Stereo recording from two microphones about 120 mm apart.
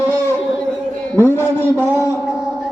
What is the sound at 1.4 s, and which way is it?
Speech, 15° left (ahead or behind).